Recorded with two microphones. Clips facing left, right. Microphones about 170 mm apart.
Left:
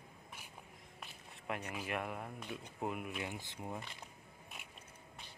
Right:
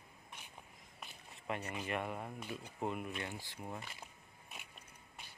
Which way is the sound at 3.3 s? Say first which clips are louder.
Left 1 dB; 20° left (ahead or behind).